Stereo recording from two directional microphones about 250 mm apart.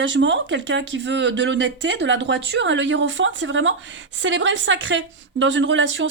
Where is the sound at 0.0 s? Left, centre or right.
Right.